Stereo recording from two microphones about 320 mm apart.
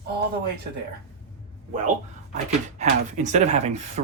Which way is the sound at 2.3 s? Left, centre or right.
Right.